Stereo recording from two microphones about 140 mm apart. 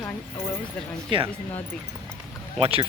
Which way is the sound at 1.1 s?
40° right (ahead or behind).